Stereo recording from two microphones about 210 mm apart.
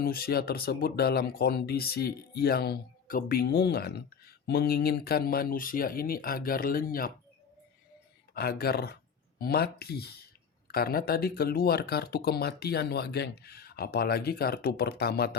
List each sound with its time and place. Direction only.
0.0 s speech: 45° left (ahead or behind)
8.3 s speech: 45° left (ahead or behind)